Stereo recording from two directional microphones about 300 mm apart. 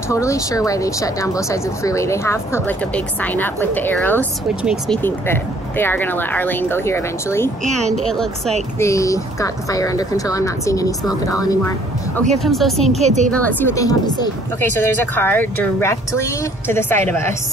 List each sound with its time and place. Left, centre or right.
0.1 s a woman's voice: centre
12.4 s a woman's voice: centre
12.9 s a woman's voice: right
13.3 s speech: centre